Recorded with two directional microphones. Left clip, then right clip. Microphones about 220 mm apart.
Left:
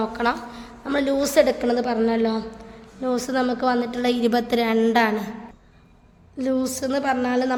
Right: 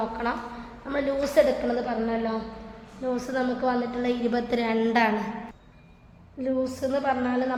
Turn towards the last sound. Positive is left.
turn(degrees=55)  # may be behind; listen again after turning